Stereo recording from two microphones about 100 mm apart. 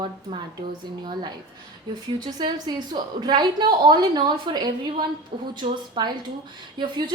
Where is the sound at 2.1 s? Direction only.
45° right (ahead or behind).